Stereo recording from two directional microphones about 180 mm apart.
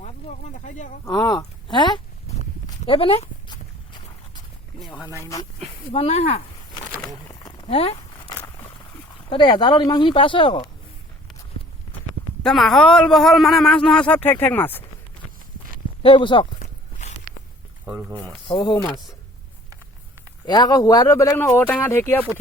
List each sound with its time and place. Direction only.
0.0 s speech: 40° left (ahead or behind)
1.0 s speech: 20° left (ahead or behind)
2.6 s a sound: 30° left (ahead or behind)
4.8 s a sound: centre (ahead or behind)
5.2 s speech: 20° left (ahead or behind)
5.9 s speech: 35° left (ahead or behind)
7.3 s a sound: 25° left (ahead or behind)
9.3 s speech: 25° left (ahead or behind)
12.4 s a man's voice: centre (ahead or behind)
16.0 s speech: 30° left (ahead or behind)
16.6 s walk: 40° left (ahead or behind)
18.4 s speech: 25° left (ahead or behind)
20.4 s speech: 20° left (ahead or behind)